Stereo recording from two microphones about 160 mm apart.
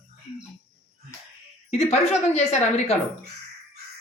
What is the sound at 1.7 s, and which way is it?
A woman's voice, 40° left (ahead or behind).